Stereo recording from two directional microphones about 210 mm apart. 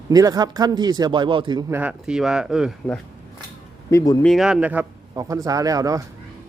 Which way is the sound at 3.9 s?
15° left (ahead or behind).